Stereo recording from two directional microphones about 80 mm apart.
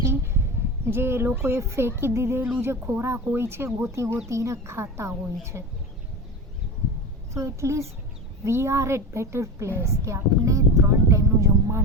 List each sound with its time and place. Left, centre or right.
0.9 s speech: right
7.3 s a woman's voice: right